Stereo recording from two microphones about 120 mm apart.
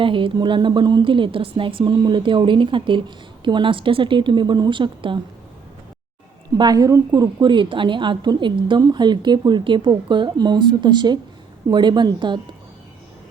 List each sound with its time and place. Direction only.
0.0 s a woman's voice: 45° right (ahead or behind)
6.6 s a woman's voice: 35° right (ahead or behind)